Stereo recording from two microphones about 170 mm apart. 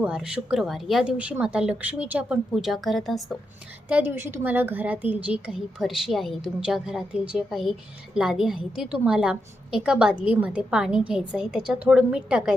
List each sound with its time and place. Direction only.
0.0 s a woman's voice: 5° right (ahead or behind)
3.8 s a woman's voice: 10° right (ahead or behind)